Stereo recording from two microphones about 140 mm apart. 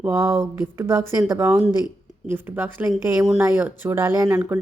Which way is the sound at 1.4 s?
5° right (ahead or behind).